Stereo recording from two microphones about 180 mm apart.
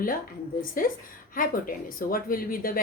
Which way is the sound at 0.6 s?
50° left (ahead or behind).